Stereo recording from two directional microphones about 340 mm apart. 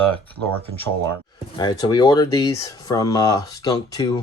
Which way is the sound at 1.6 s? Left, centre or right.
Centre.